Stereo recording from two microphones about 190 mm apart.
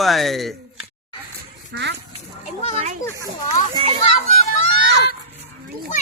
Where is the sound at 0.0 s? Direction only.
Centre (ahead or behind).